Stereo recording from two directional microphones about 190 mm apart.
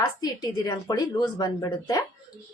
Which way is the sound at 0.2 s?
20° left (ahead or behind).